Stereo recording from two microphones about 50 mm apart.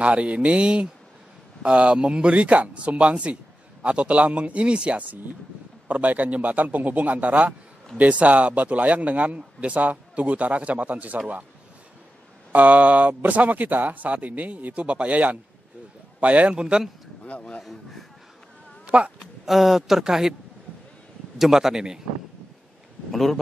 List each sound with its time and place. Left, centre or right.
0.0 s a man's voice: right
12.5 s a man's voice: right
17.2 s speech: left
17.6 s speech: centre
19.4 s speech: centre
21.4 s speech: centre